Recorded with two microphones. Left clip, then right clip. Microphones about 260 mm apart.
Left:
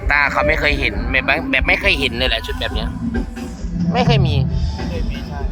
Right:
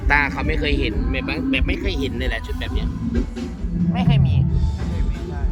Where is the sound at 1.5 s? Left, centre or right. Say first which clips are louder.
Left 7 dB; left.